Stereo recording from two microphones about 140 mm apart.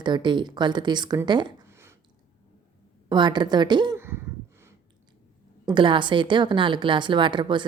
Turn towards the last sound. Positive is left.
turn(degrees=-35)  # may be behind; listen again after turning